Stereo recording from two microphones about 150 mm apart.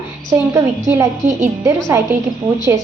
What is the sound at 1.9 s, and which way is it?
Speech, 15° right (ahead or behind).